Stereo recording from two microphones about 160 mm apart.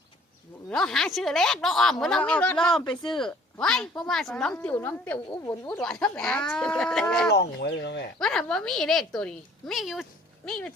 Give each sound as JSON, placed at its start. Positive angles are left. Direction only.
{"t": 0.7, "sound": "a woman's voice", "side_deg": 5}
{"t": 4.5, "sound": "a woman's voice", "side_deg": 15}
{"t": 7.3, "sound": "speech", "side_deg": 90}
{"t": 8.2, "sound": "a woman's voice", "side_deg": 5}